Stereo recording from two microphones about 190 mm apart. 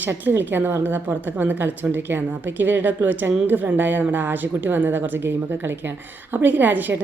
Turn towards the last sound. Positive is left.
turn(degrees=-10)  # may be behind; listen again after turning